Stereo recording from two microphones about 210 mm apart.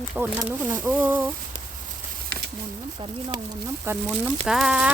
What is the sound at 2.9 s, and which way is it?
Speech, 15° right (ahead or behind).